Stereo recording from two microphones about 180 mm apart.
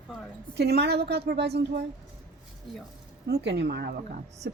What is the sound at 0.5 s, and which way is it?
A woman's voice, 65° right (ahead or behind).